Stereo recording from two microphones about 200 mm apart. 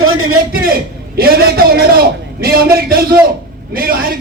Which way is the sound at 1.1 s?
50° right (ahead or behind).